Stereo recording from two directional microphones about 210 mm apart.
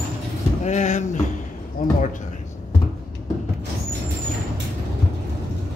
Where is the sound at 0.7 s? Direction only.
35° left (ahead or behind).